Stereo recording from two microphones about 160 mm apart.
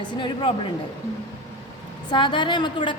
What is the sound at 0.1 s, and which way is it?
Speech, 30° left (ahead or behind).